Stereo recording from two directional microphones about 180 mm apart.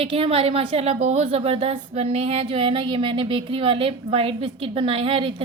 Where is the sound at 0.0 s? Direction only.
30° right (ahead or behind).